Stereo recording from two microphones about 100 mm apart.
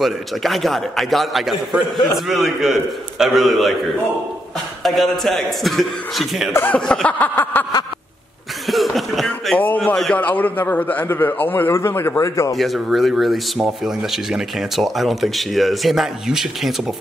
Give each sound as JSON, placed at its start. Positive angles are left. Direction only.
{"t": 0.0, "sound": "speech", "side_deg": 0}
{"t": 4.8, "sound": "speech", "side_deg": 0}
{"t": 6.5, "sound": "a man's voice", "side_deg": 20}
{"t": 6.9, "sound": "a sound", "side_deg": 10}
{"t": 8.6, "sound": "a sound", "side_deg": 0}
{"t": 10.1, "sound": "a man's voice", "side_deg": 15}
{"t": 12.5, "sound": "speech", "side_deg": 0}